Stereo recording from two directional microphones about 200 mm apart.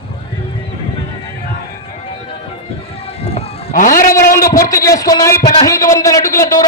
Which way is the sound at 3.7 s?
45° left (ahead or behind).